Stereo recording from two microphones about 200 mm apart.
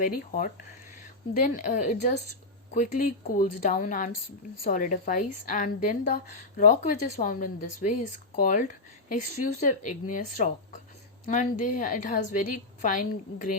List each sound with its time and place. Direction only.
0.0 s a woman's voice: 45° left (ahead or behind)